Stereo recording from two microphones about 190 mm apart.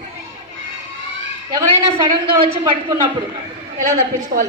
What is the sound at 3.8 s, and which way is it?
Speech, 45° right (ahead or behind).